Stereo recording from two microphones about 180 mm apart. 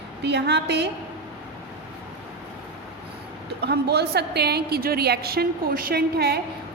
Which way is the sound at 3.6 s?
65° right (ahead or behind).